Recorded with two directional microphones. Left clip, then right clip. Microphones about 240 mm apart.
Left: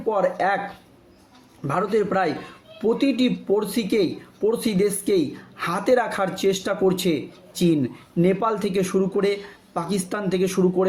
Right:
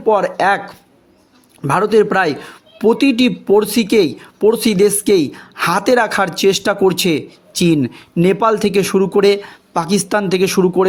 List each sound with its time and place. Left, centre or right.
0.1 s speech: right
1.6 s speech: right